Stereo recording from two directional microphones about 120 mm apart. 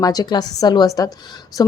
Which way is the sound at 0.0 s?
30° left (ahead or behind).